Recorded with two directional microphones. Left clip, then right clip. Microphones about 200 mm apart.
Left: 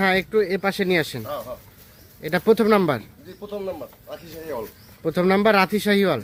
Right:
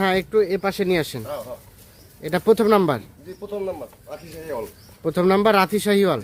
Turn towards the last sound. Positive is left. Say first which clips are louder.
# right 1 dB
turn(degrees=0)  # may be behind; listen again after turning